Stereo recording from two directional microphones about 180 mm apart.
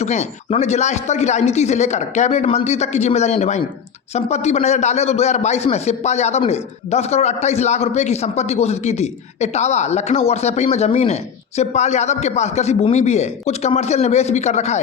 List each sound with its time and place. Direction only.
0.0 s a man's voice: 40° left (ahead or behind)